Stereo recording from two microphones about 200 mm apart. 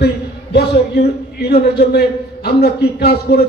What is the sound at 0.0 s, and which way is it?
A man's voice, 55° left (ahead or behind).